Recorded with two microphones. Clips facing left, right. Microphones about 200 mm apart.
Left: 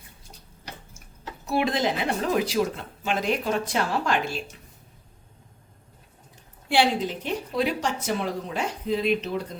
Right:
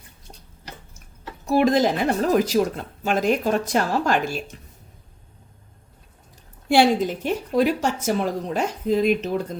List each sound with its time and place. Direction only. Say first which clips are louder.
1.5 s speech: right 6 dB; 40° right (ahead or behind)
6.7 s speech: right 5 dB; 45° right (ahead or behind)